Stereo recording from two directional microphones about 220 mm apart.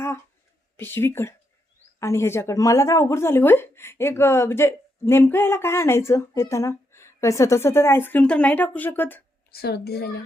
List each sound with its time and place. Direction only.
0.8 s speech: 10° left (ahead or behind)
9.5 s a woman's voice: 45° left (ahead or behind)